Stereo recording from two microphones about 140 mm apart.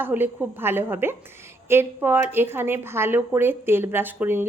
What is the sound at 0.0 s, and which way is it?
A woman's voice, 15° right (ahead or behind).